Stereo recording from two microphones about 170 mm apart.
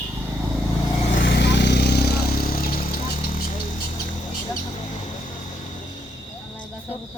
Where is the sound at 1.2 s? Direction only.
75° left (ahead or behind).